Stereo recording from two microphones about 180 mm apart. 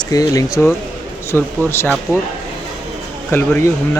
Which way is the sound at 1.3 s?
5° left (ahead or behind).